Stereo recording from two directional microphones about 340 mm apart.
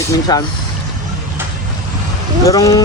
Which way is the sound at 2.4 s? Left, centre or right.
Centre.